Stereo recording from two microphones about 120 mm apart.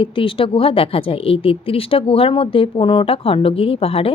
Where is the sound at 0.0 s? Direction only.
45° left (ahead or behind).